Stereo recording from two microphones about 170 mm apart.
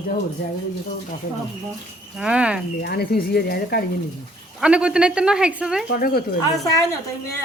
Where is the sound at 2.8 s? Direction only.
65° left (ahead or behind).